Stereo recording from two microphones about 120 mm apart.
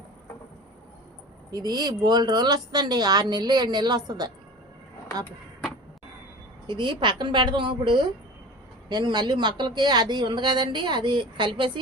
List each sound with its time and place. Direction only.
1.5 s speech: 35° right (ahead or behind)
6.7 s speech: 40° right (ahead or behind)